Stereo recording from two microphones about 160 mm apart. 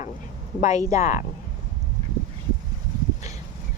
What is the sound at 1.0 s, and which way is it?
Speech, 45° left (ahead or behind).